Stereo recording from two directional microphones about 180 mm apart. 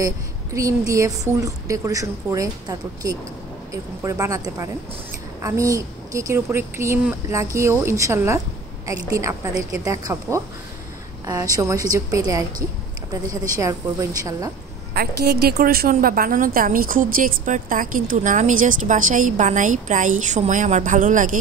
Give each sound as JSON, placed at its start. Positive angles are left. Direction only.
{"t": 0.6, "sound": "a woman's voice", "side_deg": -20}
{"t": 15.0, "sound": "a woman's voice", "side_deg": -65}